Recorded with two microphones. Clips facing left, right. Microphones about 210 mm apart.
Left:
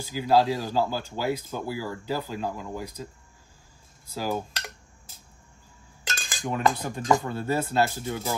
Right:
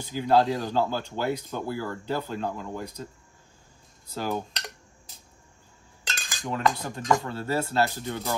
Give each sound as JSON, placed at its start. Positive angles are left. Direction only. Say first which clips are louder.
{"t": 0.0, "sound": "speech", "louder": "even", "side_deg": 5}
{"t": 4.1, "sound": "cutlery", "louder": "left 1 dB", "side_deg": 5}
{"t": 6.2, "sound": "cutlery", "louder": "left 1 dB", "side_deg": 25}
{"t": 7.2, "sound": "speech", "louder": "left 1 dB", "side_deg": 15}
{"t": 8.0, "sound": "speech", "louder": "even", "side_deg": 0}